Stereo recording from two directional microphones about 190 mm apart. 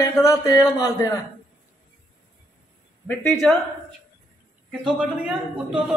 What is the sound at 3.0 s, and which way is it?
Speech, 5° left (ahead or behind).